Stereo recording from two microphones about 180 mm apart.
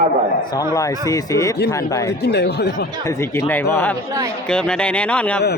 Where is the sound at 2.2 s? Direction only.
65° left (ahead or behind).